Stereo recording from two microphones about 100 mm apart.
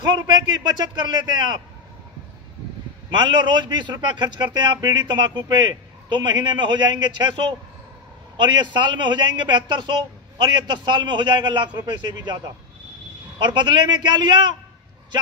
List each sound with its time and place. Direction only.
0.7 s a man's voice: 45° right (ahead or behind)
3.1 s a man's voice: 50° right (ahead or behind)
13.4 s a man's voice: 50° right (ahead or behind)